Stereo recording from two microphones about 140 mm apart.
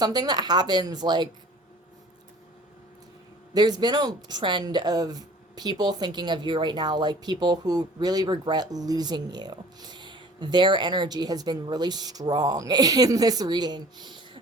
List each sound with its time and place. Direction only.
0.0 s speech: 30° right (ahead or behind)
3.5 s speech: 30° right (ahead or behind)